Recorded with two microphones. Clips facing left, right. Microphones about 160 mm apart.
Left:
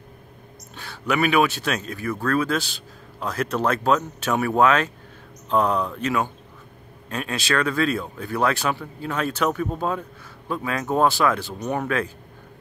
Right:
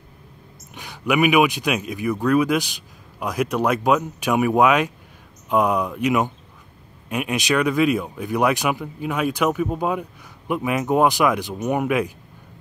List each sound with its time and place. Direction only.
0.7 s speech: 15° right (ahead or behind)